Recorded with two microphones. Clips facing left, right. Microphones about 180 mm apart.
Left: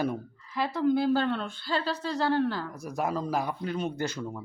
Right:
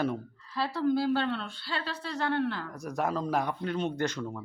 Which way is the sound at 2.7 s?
5° left (ahead or behind).